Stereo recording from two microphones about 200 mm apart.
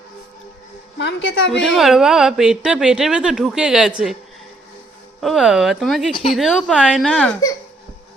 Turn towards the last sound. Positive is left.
turn(degrees=5)  # may be behind; listen again after turning